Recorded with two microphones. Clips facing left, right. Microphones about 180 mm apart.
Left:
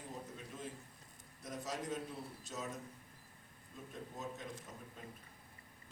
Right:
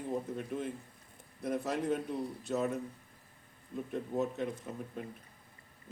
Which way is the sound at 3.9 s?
65° right (ahead or behind).